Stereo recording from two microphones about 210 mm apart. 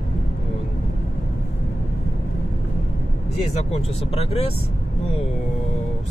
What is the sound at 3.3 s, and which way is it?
Speech, 30° left (ahead or behind).